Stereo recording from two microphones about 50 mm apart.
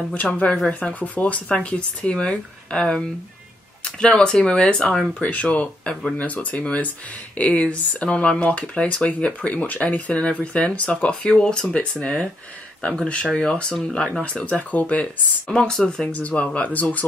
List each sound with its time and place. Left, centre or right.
0.1 s speech: left
14.7 s speech: left
15.5 s speech: centre
16.1 s speech: left